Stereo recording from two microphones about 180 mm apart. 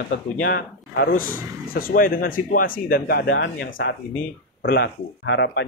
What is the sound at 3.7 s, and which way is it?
Speech, 70° left (ahead or behind).